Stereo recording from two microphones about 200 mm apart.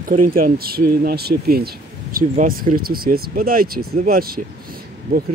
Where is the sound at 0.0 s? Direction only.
45° right (ahead or behind).